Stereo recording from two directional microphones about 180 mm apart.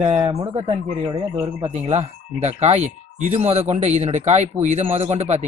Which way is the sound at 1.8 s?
35° right (ahead or behind).